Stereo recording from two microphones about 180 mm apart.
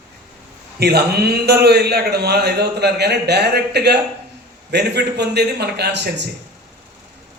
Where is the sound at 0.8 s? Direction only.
60° right (ahead or behind).